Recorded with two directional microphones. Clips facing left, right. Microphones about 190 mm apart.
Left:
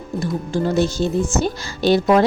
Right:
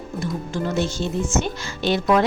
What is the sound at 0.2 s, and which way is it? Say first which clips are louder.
Speech: left 5 dB; 35° left (ahead or behind).